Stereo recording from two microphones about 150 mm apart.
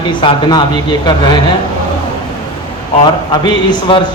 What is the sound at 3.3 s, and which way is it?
Speech, 30° left (ahead or behind).